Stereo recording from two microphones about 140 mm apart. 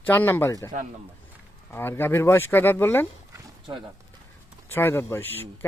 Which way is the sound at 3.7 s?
35° right (ahead or behind).